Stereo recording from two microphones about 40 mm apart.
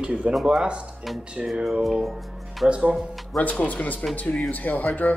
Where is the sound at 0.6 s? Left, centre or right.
Right.